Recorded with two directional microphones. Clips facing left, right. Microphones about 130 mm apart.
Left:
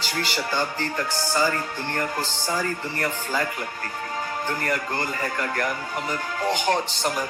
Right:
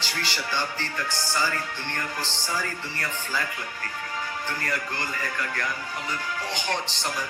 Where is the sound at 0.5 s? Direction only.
40° left (ahead or behind).